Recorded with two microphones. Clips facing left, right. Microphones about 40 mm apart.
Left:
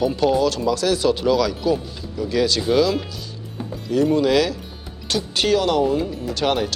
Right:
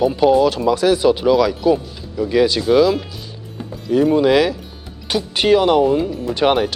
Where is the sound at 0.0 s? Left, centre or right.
Centre.